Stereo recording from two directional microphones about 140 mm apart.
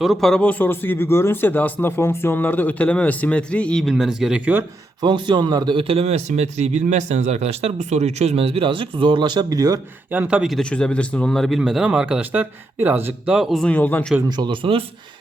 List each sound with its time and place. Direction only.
0.0 s speech: centre (ahead or behind)
5.0 s a man's voice: 35° right (ahead or behind)
10.1 s speech: 10° right (ahead or behind); by 14.0 s 10° left (ahead or behind)
14.3 s a man's voice: 30° right (ahead or behind)